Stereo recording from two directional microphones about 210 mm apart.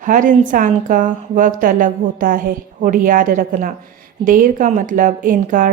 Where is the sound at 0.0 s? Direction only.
40° right (ahead or behind).